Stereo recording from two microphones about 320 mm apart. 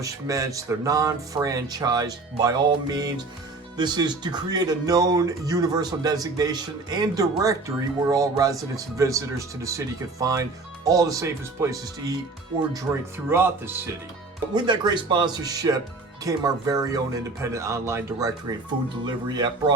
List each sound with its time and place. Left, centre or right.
0.0 s speech: centre